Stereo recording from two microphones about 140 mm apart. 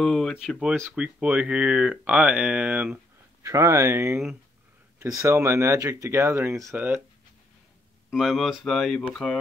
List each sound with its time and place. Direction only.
0.0 s speech: 5° left (ahead or behind)
3.4 s speech: 20° right (ahead or behind)
8.1 s speech: centre (ahead or behind)